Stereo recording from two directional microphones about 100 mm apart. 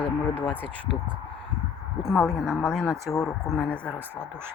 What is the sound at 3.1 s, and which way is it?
Speech, 35° left (ahead or behind).